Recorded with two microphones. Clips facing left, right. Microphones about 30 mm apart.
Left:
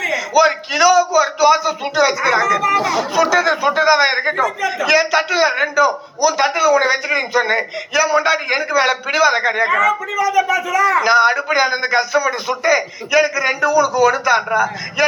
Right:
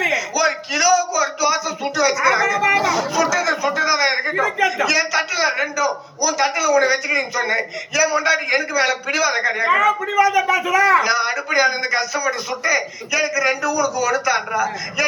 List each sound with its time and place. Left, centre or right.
0.3 s a sound: left
2.8 s speech: left
4.4 s speech: centre
4.9 s speech: left
10.2 s a man's voice: right
11.0 s speech: left
14.1 s speech: left
14.5 s a man's voice: left